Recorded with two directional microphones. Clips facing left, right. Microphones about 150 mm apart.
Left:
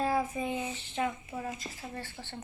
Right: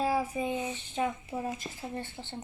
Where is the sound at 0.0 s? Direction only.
10° right (ahead or behind).